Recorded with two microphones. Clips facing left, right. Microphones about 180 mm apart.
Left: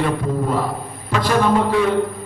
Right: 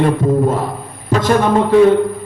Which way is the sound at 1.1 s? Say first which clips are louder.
Right 6 dB; 45° right (ahead or behind).